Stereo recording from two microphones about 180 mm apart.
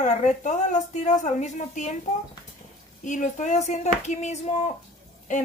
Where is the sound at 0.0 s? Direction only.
45° left (ahead or behind).